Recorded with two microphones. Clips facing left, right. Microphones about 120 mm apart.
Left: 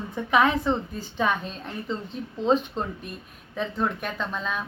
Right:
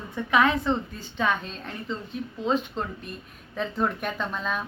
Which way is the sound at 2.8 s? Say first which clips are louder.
Left 1 dB; 15° left (ahead or behind).